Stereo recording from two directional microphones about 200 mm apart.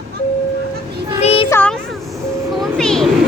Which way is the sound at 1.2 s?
30° left (ahead or behind).